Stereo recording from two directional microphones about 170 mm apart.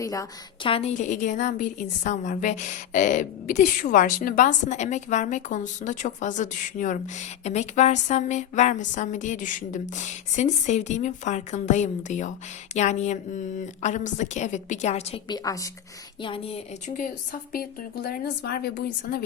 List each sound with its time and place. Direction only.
0.0 s a woman's voice: 20° left (ahead or behind)
0.7 s a woman's voice: 40° left (ahead or behind)
15.3 s a woman's voice: 20° left (ahead or behind)
16.2 s a woman's voice: 35° left (ahead or behind)
17.5 s a woman's voice: 65° left (ahead or behind)